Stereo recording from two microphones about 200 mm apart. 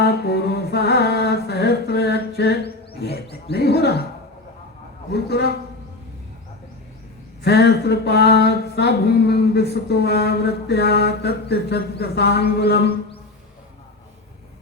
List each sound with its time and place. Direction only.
0.0 s mantra: 55° left (ahead or behind)
3.5 s a sound: 55° left (ahead or behind)
7.4 s speech: 55° left (ahead or behind)